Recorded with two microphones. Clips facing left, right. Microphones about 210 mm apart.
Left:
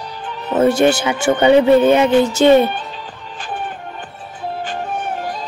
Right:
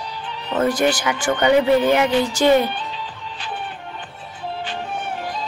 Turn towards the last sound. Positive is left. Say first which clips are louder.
# left 3 dB
turn(degrees=45)  # may be behind; listen again after turning